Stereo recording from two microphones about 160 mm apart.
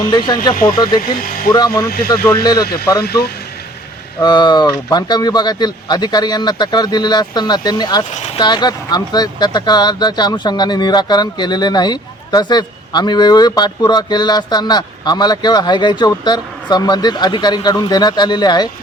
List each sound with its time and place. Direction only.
0.1 s speech: 30° left (ahead or behind)
3.0 s speech: 75° left (ahead or behind)
4.2 s speech: 30° left (ahead or behind)